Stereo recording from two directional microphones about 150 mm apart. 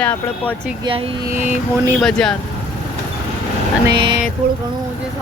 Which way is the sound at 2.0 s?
5° left (ahead or behind).